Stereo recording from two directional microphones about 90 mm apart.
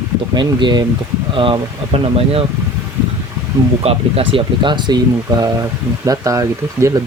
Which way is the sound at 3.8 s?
90° right.